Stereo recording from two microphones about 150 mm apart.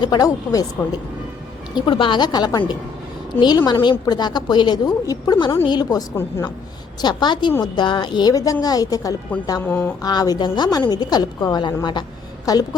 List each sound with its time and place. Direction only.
0.0 s a woman's voice: 25° left (ahead or behind)
1.7 s a woman's voice: 35° left (ahead or behind); by 6.5 s 15° left (ahead or behind)
7.0 s a woman's voice: 30° left (ahead or behind); by 9.9 s 15° left (ahead or behind)
10.0 s a woman's voice: 25° left (ahead or behind)